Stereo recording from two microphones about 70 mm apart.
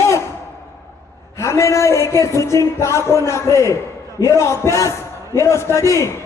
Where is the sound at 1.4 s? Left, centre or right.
Left.